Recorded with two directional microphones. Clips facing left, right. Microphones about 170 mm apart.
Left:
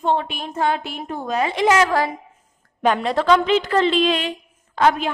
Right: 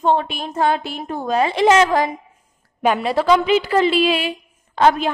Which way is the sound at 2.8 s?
10° right (ahead or behind).